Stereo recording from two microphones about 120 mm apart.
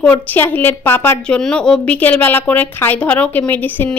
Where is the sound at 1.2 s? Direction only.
5° left (ahead or behind).